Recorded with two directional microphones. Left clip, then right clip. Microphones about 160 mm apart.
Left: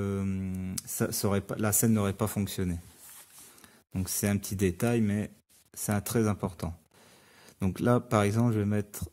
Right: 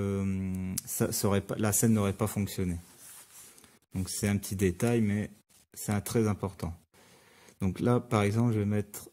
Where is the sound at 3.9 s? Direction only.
15° left (ahead or behind).